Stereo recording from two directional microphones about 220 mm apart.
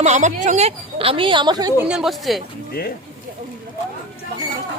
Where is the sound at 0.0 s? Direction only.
35° right (ahead or behind); by 1.9 s 15° right (ahead or behind).